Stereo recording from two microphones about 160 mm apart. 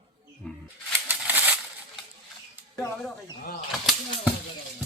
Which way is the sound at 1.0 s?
10° right (ahead or behind).